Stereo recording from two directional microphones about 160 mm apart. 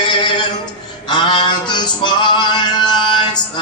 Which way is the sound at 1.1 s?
30° left (ahead or behind).